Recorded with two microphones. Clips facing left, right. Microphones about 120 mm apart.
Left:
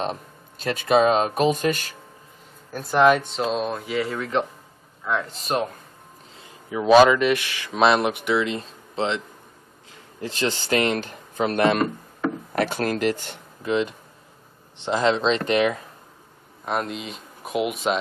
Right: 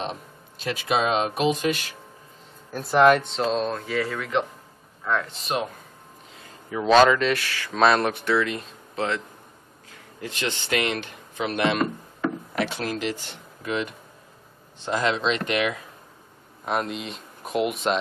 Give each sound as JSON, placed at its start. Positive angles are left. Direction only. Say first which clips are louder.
{"t": 0.0, "sound": "speech", "louder": "left 4 dB", "side_deg": 40}
{"t": 2.7, "sound": "speech", "louder": "even", "side_deg": 0}
{"t": 4.1, "sound": "speech", "louder": "left 2 dB", "side_deg": 35}
{"t": 5.1, "sound": "speech", "louder": "even", "side_deg": 5}
{"t": 6.7, "sound": "speech", "louder": "left 3 dB", "side_deg": 10}
{"t": 8.5, "sound": "speech", "louder": "left 2 dB", "side_deg": 30}
{"t": 10.2, "sound": "speech", "louder": "left 4 dB", "side_deg": 35}
{"t": 13.6, "sound": "speech", "louder": "left 5 dB", "side_deg": 25}
{"t": 16.6, "sound": "speech", "louder": "even", "side_deg": 0}